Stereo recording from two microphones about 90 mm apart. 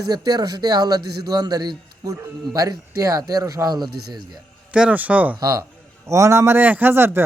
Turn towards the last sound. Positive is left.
turn(degrees=-25)  # may be behind; listen again after turning